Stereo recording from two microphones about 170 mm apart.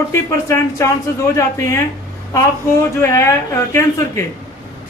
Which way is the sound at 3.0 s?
15° left (ahead or behind).